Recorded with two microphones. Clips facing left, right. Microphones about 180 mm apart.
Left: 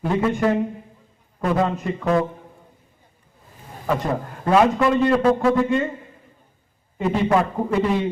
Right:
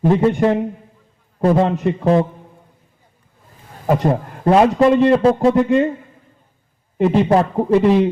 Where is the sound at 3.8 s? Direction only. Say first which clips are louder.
Right 6 dB; 35° right (ahead or behind).